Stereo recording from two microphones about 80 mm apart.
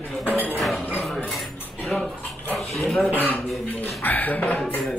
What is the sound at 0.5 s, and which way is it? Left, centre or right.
Music, centre.